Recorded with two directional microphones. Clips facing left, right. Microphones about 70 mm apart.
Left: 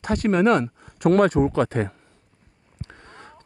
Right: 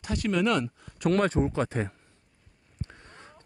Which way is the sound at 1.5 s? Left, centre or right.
Left.